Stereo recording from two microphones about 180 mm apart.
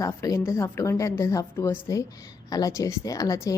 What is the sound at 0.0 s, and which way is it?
A woman's voice, 15° left (ahead or behind).